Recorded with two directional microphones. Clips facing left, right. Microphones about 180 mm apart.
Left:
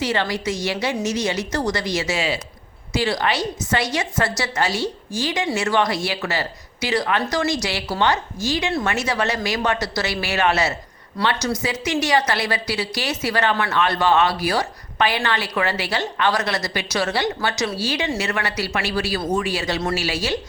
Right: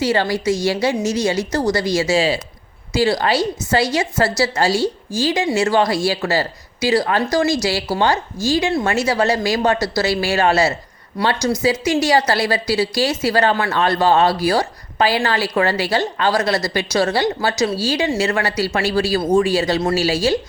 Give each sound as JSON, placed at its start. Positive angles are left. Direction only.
{"t": 0.0, "sound": "a woman's voice", "side_deg": -30}